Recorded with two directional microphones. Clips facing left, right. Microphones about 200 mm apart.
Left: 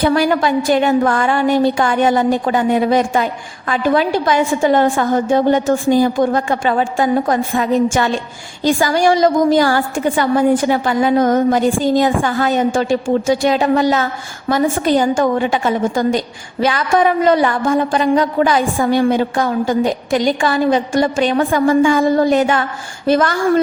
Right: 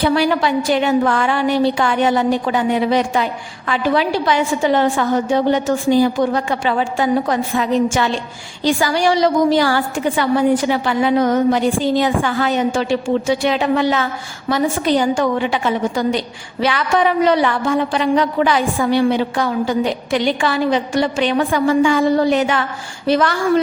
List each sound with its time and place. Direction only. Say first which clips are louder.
0.0 s a woman's voice: left 2 dB; 45° left (ahead or behind)